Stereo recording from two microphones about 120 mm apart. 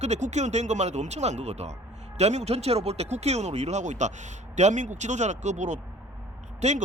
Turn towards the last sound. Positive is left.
turn(degrees=-70)  # may be behind; listen again after turning